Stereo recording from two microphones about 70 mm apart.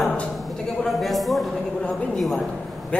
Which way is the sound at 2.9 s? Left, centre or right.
Centre.